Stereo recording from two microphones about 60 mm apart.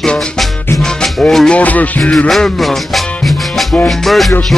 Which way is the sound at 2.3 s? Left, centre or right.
Centre.